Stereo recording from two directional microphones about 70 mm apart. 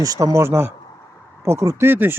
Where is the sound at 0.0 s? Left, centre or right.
Right.